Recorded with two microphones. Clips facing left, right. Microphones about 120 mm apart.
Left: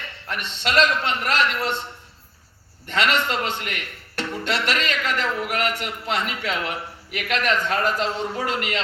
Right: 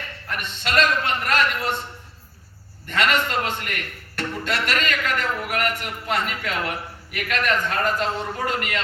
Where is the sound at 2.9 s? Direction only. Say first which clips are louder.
Even; 50° right (ahead or behind).